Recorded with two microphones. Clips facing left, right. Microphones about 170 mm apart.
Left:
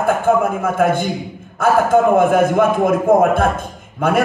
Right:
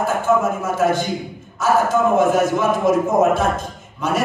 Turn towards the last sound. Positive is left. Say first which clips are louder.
# left 5 dB
turn(degrees=55)  # may be behind; listen again after turning